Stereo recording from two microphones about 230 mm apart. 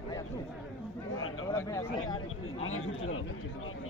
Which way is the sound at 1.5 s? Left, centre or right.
Centre.